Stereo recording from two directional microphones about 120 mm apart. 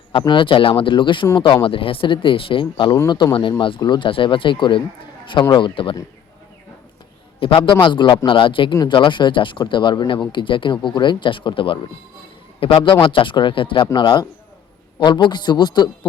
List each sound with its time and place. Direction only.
0.1 s speech: 45° left (ahead or behind)
2.9 s speech: 35° left (ahead or behind)
7.3 s speech: 45° left (ahead or behind)